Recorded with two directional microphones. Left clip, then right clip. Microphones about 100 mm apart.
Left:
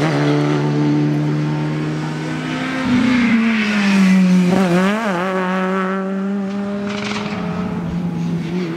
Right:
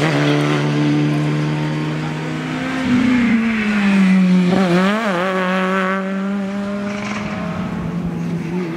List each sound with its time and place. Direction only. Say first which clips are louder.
0.0 s vehicle: even; 10° right (ahead or behind)
3.1 s vehicle: left 1 dB; 35° left (ahead or behind); by 5.1 s 5° left (ahead or behind)
5.5 s vehicle: right 2 dB; 15° right (ahead or behind)